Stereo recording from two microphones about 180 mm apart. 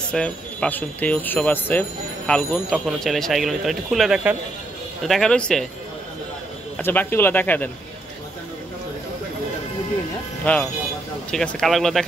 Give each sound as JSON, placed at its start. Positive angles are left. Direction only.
{"t": 0.1, "sound": "speech", "side_deg": 5}
{"t": 6.8, "sound": "speech", "side_deg": 10}
{"t": 10.4, "sound": "speech", "side_deg": 10}